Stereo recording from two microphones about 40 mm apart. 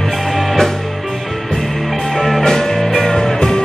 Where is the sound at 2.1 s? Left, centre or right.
Centre.